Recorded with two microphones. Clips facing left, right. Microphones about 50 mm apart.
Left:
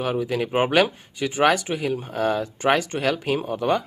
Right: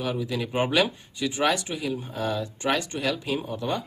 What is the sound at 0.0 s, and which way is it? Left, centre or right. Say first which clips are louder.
Speech: left 5 dB; left.